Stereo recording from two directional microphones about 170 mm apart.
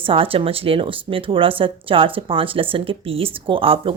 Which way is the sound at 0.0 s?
30° right (ahead or behind).